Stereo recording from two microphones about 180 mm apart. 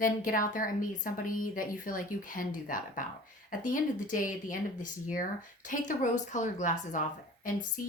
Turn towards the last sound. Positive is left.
turn(degrees=45)  # may be behind; listen again after turning